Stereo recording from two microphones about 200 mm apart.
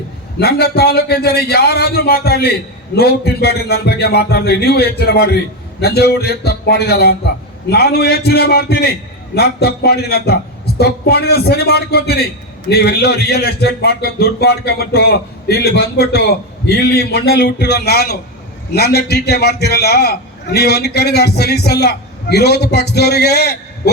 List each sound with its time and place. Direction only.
0.3 s a man's voice: 55° left (ahead or behind)